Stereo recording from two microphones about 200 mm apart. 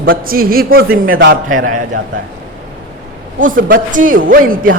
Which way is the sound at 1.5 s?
90° right.